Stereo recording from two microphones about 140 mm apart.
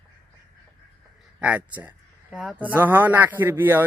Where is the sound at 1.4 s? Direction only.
10° right (ahead or behind).